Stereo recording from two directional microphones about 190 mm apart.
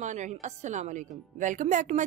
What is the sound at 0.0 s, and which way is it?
A woman's voice, 40° right (ahead or behind).